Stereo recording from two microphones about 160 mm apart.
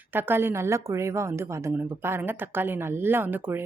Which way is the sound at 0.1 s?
15° right (ahead or behind).